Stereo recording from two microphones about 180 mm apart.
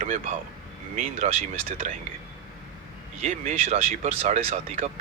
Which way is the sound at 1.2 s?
40° right (ahead or behind).